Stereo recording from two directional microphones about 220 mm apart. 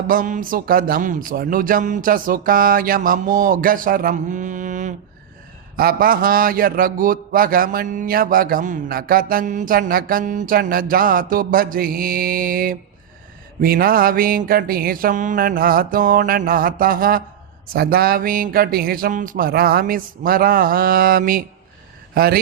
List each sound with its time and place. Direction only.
0.1 s a man's voice: 40° right (ahead or behind)